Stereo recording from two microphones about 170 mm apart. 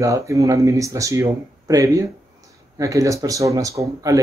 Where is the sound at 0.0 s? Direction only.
20° right (ahead or behind).